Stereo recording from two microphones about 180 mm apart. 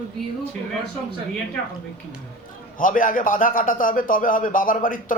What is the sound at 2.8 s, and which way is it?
A man's voice, 50° left (ahead or behind).